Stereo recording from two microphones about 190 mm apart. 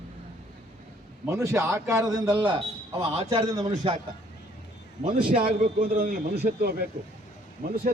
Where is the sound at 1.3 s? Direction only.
15° right (ahead or behind).